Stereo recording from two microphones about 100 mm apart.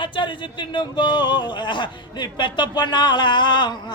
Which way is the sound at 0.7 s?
50° left (ahead or behind).